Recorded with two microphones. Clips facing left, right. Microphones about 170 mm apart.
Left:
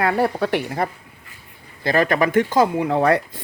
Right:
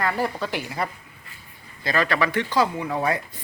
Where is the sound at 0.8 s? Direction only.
50° left (ahead or behind).